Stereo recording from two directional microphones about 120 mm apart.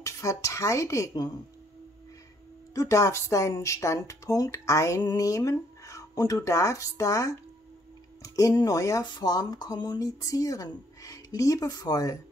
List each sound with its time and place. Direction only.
0.0 s speech: 25° left (ahead or behind)
2.7 s speech: 30° left (ahead or behind)